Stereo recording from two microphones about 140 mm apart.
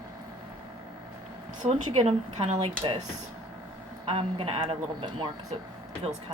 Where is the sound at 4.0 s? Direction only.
40° right (ahead or behind).